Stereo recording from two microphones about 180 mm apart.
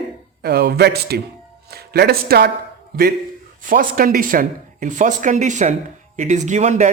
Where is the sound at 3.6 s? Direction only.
50° right (ahead or behind).